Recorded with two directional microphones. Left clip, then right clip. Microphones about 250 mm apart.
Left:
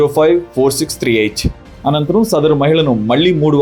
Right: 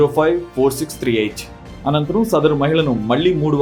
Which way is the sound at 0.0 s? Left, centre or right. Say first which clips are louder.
Left 4 dB; left.